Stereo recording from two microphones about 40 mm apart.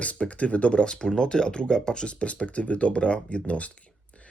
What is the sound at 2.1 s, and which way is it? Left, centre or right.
Speech, left.